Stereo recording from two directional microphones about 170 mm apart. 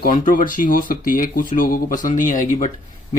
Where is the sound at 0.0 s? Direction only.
50° left (ahead or behind).